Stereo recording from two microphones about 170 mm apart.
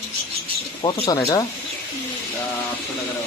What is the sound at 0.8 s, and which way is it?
Speech, 25° left (ahead or behind).